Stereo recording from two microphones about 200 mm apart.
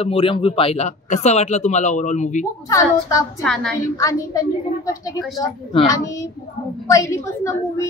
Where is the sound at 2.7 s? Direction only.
15° left (ahead or behind).